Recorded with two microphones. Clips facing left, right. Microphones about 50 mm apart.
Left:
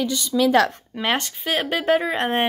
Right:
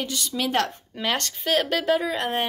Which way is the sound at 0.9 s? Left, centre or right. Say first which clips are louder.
Left 2 dB; centre.